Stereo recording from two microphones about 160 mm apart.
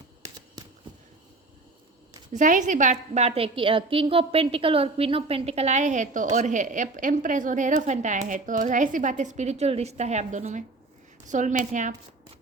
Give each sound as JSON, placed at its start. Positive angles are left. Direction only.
{"t": 2.3, "sound": "a woman's voice", "side_deg": -50}